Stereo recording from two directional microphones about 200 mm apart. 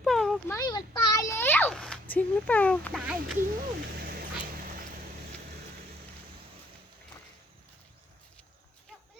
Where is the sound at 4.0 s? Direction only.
50° right (ahead or behind).